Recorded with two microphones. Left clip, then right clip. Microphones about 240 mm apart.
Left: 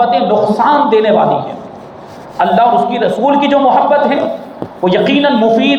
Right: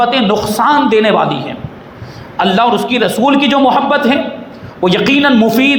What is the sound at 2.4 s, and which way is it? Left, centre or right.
A man's voice, right.